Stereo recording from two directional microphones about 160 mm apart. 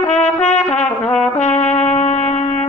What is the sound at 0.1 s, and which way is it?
Trumpet, 45° left (ahead or behind).